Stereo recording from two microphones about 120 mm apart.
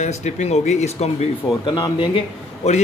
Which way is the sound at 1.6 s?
40° left (ahead or behind).